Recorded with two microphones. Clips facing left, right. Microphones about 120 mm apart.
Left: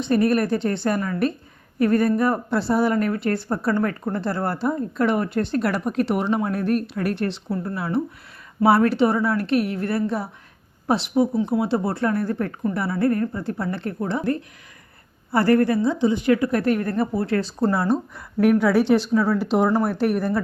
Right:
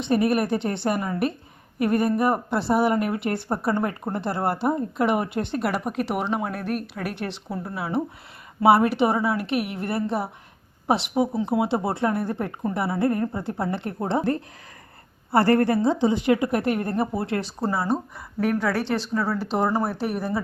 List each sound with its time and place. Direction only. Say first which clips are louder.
0.0 s a woman's voice: left 2 dB; 20° right (ahead or behind)
17.6 s speech: left 3 dB; 5° right (ahead or behind)
18.4 s speech: left 7 dB; 5° left (ahead or behind)